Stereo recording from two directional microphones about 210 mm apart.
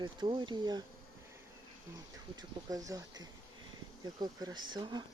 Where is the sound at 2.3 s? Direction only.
15° right (ahead or behind).